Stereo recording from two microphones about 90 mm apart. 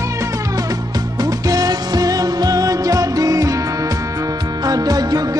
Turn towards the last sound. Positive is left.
turn(degrees=-45)  # may be behind; listen again after turning